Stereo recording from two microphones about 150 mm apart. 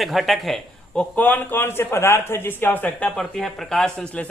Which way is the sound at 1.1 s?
10° left (ahead or behind).